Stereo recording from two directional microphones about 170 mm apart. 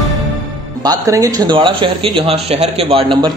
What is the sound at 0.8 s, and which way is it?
Speech, 20° right (ahead or behind).